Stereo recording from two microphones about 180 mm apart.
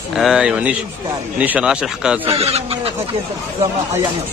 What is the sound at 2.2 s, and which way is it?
Speech, 35° right (ahead or behind).